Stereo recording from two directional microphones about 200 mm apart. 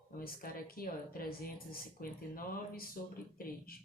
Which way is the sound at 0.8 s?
45° left (ahead or behind).